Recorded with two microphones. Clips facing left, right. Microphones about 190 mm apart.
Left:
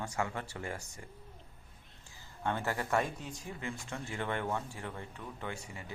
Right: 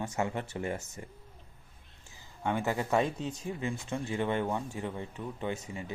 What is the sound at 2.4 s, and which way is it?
Speech, 15° right (ahead or behind).